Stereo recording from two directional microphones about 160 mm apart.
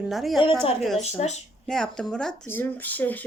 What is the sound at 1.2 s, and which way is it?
Speech, 45° left (ahead or behind).